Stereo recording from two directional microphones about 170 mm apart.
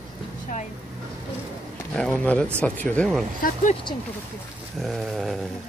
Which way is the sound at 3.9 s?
25° left (ahead or behind).